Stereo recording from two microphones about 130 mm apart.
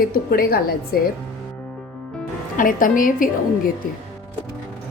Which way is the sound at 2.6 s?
90° left.